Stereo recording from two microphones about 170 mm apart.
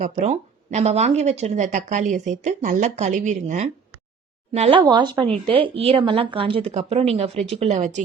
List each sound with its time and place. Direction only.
0.0 s speech: 40° right (ahead or behind)